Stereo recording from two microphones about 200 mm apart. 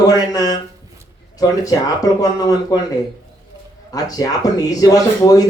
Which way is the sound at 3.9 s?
20° left (ahead or behind).